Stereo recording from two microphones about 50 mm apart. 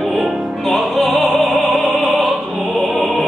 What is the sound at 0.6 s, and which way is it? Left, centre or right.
Opera, centre.